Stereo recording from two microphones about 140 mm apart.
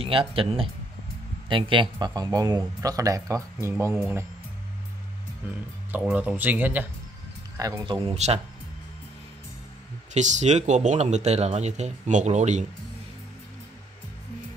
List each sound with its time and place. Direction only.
0.0 s speech: 40° right (ahead or behind); by 3.7 s 25° right (ahead or behind)
5.9 s speech: 10° right (ahead or behind)
7.5 s speech: 25° right (ahead or behind); by 8.4 s 45° right (ahead or behind)
10.1 s speech: 55° right (ahead or behind)